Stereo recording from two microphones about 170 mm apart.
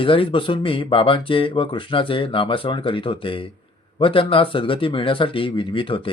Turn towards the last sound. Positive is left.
turn(degrees=30)  # may be behind; listen again after turning